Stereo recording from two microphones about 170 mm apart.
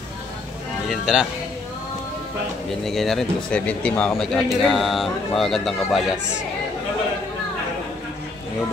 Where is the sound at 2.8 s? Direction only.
Centre (ahead or behind).